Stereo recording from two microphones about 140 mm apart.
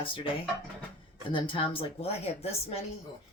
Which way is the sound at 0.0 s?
40° left (ahead or behind).